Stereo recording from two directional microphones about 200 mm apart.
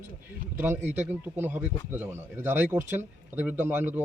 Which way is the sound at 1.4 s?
10° right (ahead or behind).